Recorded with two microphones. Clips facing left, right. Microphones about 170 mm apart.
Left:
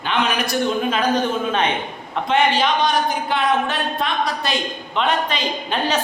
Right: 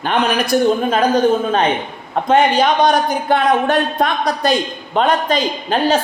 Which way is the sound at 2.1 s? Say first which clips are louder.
Right 5 dB; 45° right (ahead or behind).